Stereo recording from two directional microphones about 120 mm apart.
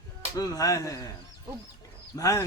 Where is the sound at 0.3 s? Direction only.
30° left (ahead or behind).